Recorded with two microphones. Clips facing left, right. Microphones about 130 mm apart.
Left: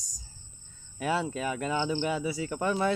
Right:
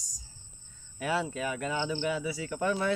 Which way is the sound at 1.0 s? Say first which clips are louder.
Left 2 dB; 25° left (ahead or behind).